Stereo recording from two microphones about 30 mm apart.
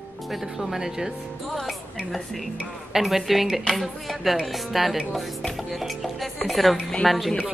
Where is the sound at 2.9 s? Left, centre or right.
Centre.